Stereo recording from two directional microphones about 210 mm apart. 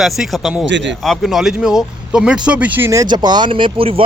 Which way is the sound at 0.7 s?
60° right (ahead or behind).